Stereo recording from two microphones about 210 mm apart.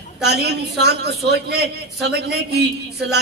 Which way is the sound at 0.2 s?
50° right (ahead or behind).